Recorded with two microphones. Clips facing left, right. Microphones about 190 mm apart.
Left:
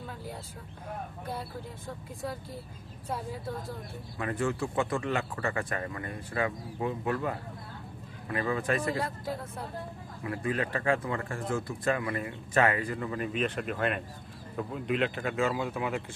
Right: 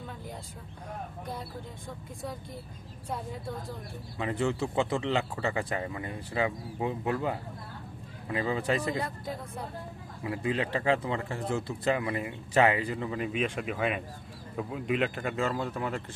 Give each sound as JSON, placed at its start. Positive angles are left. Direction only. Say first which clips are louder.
{"t": 4.2, "sound": "speech", "louder": "right 1 dB", "side_deg": -20}
{"t": 9.0, "sound": "speech", "louder": "left 1 dB", "side_deg": 0}
{"t": 10.2, "sound": "speech", "louder": "right 1 dB", "side_deg": -20}